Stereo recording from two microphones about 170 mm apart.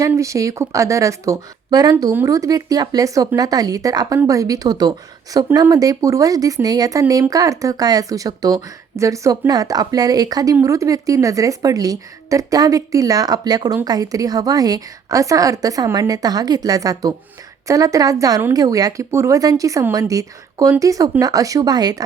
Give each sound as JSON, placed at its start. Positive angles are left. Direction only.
{"t": 0.0, "sound": "speech", "side_deg": -20}